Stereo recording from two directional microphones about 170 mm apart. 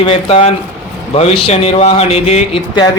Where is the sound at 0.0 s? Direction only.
35° left (ahead or behind).